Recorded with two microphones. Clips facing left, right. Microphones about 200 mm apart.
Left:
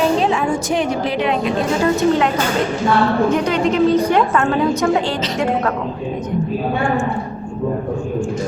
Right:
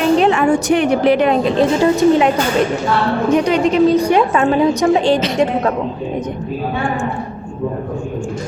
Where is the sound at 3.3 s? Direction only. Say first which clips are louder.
Right 3 dB; 15° right (ahead or behind).